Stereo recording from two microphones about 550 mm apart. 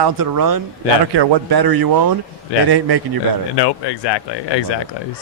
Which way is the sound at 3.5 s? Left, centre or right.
Left.